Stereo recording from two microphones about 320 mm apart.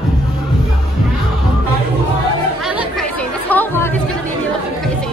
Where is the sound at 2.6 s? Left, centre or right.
Centre.